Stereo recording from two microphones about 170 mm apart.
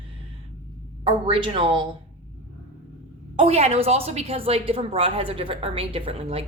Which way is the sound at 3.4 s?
35° right (ahead or behind).